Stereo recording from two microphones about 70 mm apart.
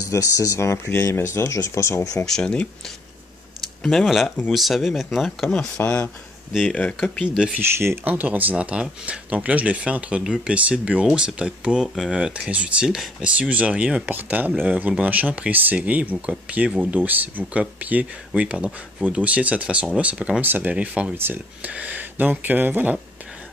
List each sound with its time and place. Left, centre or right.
0.1 s speech: left
2.2 s speech: centre
3.8 s speech: centre
5.8 s speech: left
6.7 s speech: centre
7.2 s speech: centre
7.5 s speech: right
8.0 s speech: right
14.0 s speech: right